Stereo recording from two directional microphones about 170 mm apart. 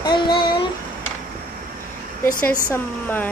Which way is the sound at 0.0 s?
25° left (ahead or behind).